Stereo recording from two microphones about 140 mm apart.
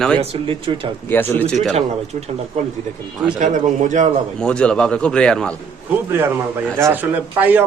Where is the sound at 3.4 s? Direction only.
65° right (ahead or behind).